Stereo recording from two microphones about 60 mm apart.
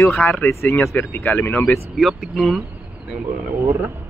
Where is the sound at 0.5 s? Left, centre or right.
Left.